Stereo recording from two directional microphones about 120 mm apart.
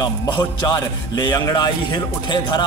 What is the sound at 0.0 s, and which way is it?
A man's voice, 35° left (ahead or behind).